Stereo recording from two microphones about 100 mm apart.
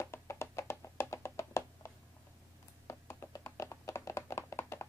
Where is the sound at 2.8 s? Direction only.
30° left (ahead or behind).